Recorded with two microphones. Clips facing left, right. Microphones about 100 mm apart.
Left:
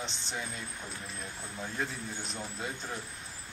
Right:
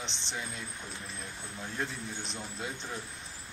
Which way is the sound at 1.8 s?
Centre (ahead or behind).